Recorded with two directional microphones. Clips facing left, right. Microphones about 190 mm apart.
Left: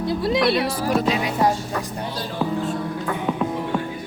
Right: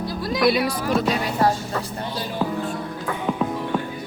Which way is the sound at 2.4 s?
Centre (ahead or behind).